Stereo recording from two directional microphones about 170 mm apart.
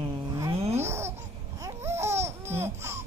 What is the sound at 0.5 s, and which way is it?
Babbling, 35° right (ahead or behind).